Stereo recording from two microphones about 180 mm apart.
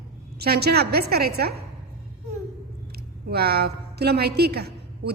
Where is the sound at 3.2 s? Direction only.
60° right (ahead or behind).